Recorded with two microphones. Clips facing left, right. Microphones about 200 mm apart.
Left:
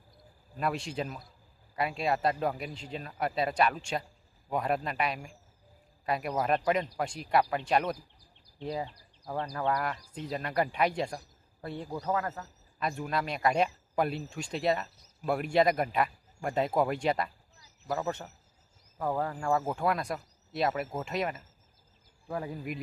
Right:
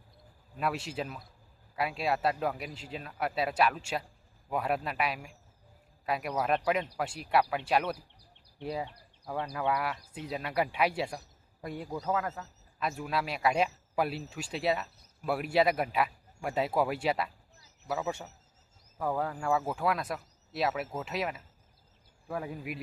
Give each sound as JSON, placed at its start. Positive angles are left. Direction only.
{"t": 0.5, "sound": "speech", "side_deg": -5}
{"t": 7.9, "sound": "a sound", "side_deg": -65}
{"t": 9.6, "sound": "speech", "side_deg": -5}
{"t": 12.3, "sound": "speech", "side_deg": 0}